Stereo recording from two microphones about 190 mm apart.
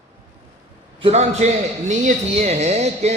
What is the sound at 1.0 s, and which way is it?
A man's voice, 30° right (ahead or behind).